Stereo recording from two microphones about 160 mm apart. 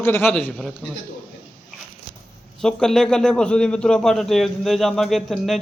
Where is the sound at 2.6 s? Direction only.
5° left (ahead or behind).